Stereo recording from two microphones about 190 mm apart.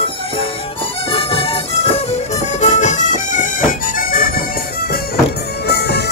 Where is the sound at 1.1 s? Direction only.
30° left (ahead or behind); by 4.3 s 45° left (ahead or behind).